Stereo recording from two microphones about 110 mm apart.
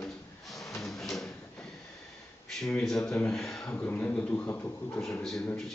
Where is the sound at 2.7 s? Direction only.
5° left (ahead or behind).